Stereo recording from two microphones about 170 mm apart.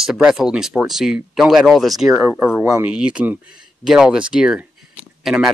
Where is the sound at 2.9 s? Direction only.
5° right (ahead or behind).